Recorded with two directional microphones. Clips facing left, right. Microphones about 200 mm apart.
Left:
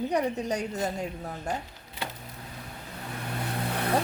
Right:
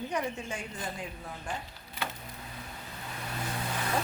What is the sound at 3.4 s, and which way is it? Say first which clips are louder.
Vehicle: left 5 dB; 60° left (ahead or behind).